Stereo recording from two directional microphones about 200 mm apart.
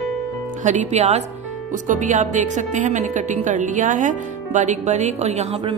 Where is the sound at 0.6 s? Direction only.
35° right (ahead or behind).